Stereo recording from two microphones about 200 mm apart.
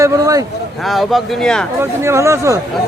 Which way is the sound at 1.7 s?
15° right (ahead or behind).